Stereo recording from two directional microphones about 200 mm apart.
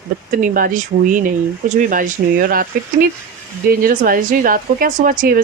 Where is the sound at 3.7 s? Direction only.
45° right (ahead or behind).